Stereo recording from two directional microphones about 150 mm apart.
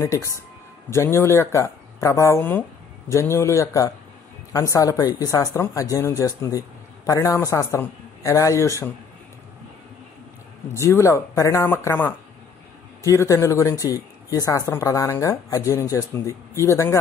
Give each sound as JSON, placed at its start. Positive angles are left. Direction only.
{"t": 0.0, "sound": "speech", "side_deg": 20}
{"t": 10.7, "sound": "speech", "side_deg": 20}